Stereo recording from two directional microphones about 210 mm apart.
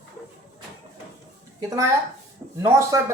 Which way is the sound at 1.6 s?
15° right (ahead or behind).